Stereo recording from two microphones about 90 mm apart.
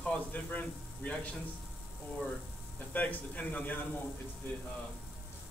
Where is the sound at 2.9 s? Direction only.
15° left (ahead or behind).